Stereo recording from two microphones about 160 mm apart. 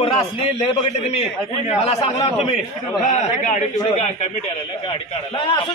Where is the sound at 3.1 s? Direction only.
50° left (ahead or behind).